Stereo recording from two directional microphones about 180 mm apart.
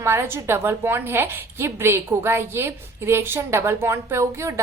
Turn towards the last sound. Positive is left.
turn(degrees=-15)  # may be behind; listen again after turning